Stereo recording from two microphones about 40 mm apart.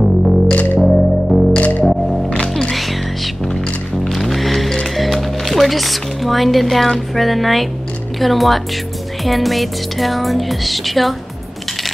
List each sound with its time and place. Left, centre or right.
0.0 s music: centre
1.6 s music: left
2.4 s music: centre
4.0 s music: centre